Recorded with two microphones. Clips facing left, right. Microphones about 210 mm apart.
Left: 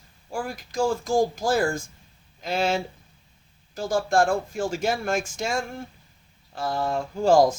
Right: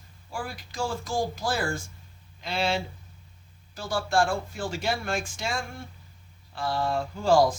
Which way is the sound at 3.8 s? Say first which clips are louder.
Left 4 dB; 45° left (ahead or behind).